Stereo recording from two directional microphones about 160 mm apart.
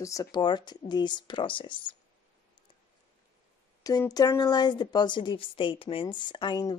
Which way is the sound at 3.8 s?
25° left (ahead or behind).